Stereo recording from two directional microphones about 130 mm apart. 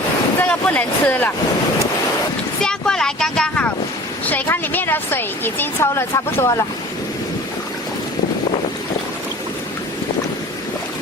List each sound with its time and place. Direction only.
0.3 s speech: 15° left (ahead or behind)
2.6 s vehicle: 5° left (ahead or behind)
4.3 s speech: 15° left (ahead or behind)